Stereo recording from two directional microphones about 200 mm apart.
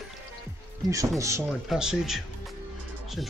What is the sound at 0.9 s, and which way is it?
Speech, 15° right (ahead or behind).